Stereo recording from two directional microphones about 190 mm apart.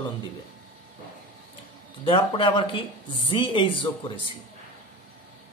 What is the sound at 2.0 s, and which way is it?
Speech, 25° left (ahead or behind).